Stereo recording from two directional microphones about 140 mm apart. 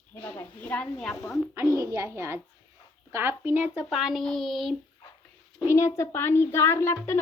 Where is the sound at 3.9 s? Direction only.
Centre (ahead or behind).